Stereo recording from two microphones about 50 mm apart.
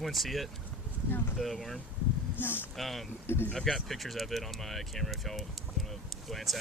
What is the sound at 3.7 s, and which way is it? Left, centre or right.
Speech, centre.